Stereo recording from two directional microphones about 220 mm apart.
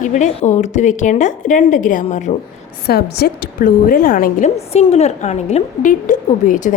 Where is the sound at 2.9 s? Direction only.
45° left (ahead or behind).